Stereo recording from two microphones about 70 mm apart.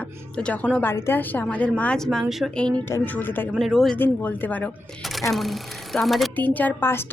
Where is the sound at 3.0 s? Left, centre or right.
Left.